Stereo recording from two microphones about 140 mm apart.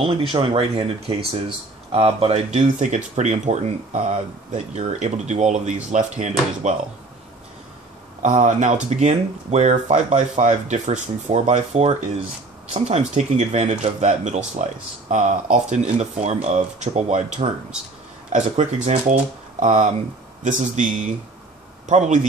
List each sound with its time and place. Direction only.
0.0 s speech: 40° right (ahead or behind); by 6.7 s 55° right (ahead or behind)
8.2 s speech: 60° right (ahead or behind)